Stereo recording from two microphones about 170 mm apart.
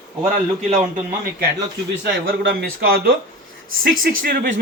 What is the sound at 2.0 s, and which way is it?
Speech, 70° right (ahead or behind).